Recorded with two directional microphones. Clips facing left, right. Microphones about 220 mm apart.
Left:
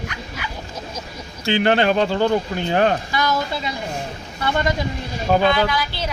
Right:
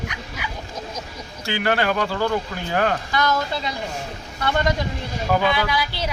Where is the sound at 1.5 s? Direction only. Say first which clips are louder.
Left 5 dB; 25° left (ahead or behind).